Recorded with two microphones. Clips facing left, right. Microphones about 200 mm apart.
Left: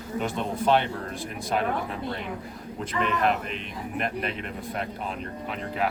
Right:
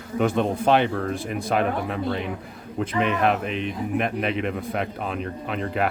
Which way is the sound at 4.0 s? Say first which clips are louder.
Right 4 dB; 65° right (ahead or behind).